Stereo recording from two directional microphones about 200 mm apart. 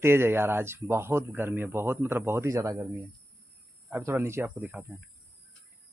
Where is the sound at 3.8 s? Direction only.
10° right (ahead or behind).